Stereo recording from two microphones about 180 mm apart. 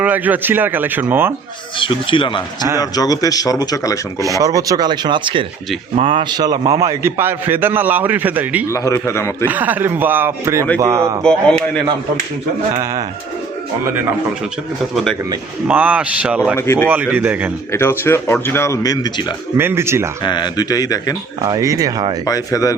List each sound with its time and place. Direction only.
0.0 s a man's voice: 10° right (ahead or behind)
1.8 s speech: 30° left (ahead or behind)
4.4 s a man's voice: 20° right (ahead or behind)
8.6 s speech: 15° left (ahead or behind)
9.5 s a man's voice: 10° right (ahead or behind)
11.2 s a man's voice: 5° left (ahead or behind)
12.8 s a man's voice: 15° right (ahead or behind)
15.6 s a man's voice: 10° right (ahead or behind)
17.7 s speech: 15° left (ahead or behind)
19.5 s a man's voice: 15° right (ahead or behind)
20.2 s speech: 25° left (ahead or behind)
21.4 s speech: 20° right (ahead or behind)
22.2 s speech: 20° left (ahead or behind)